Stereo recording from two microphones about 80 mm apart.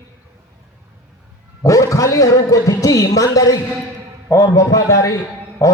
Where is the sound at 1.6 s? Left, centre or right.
Left.